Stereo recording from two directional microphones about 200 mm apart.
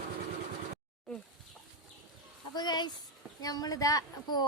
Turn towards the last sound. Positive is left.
turn(degrees=20)  # may be behind; listen again after turning